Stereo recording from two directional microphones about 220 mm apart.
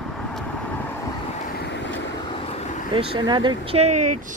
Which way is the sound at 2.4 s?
30° left (ahead or behind).